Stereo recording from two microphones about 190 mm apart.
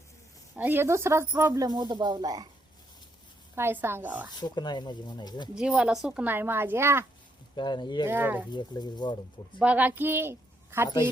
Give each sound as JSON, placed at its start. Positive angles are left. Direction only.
{"t": 0.5, "sound": "a woman's voice", "side_deg": -10}
{"t": 3.5, "sound": "a woman's voice", "side_deg": -10}
{"t": 4.4, "sound": "speech", "side_deg": 25}
{"t": 5.5, "sound": "a woman's voice", "side_deg": -5}
{"t": 7.5, "sound": "speech", "side_deg": 25}
{"t": 8.0, "sound": "a woman's voice", "side_deg": -10}
{"t": 8.5, "sound": "speech", "side_deg": 20}
{"t": 9.6, "sound": "a woman's voice", "side_deg": -5}